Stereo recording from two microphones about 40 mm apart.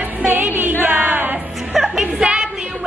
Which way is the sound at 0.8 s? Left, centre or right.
Right.